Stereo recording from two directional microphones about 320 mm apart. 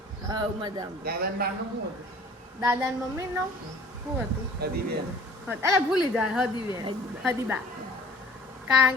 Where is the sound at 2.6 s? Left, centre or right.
Centre.